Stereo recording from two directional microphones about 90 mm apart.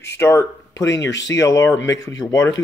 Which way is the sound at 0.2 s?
35° left (ahead or behind).